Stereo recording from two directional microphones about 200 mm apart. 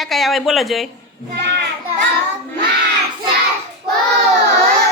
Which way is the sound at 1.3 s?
60° right (ahead or behind).